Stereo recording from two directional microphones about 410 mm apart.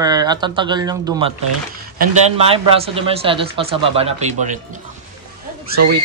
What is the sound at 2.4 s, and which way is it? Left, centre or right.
Speech, centre.